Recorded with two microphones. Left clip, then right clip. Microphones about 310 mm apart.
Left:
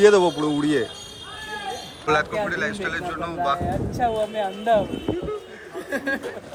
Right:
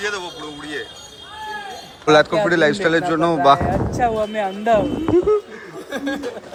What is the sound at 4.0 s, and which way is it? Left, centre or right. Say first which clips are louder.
Speech: right 2 dB; right.